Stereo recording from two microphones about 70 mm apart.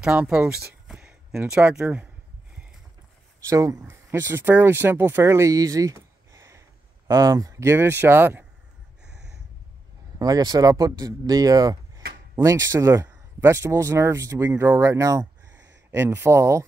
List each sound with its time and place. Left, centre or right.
0.0 s speech: centre
0.5 s a sound: centre
1.5 s speech: centre
3.4 s speech: right
3.8 s speech: right
7.1 s speech: right
7.6 s speech: right
10.1 s speech: right
13.0 s a sound: right
13.6 s speech: right
15.9 s speech: right